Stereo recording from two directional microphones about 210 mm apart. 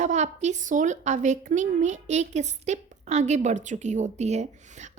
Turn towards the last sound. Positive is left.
turn(degrees=-30)  # may be behind; listen again after turning